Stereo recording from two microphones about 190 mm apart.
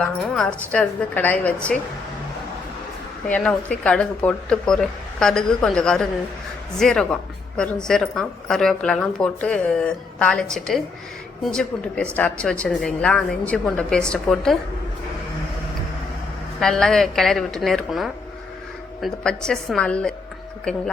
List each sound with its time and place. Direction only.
0.0 s a woman's voice: 5° left (ahead or behind)
3.2 s a woman's voice: 5° left (ahead or behind)
16.6 s a woman's voice: 5° left (ahead or behind)